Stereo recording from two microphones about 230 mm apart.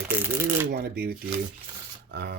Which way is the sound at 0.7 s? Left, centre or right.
Right.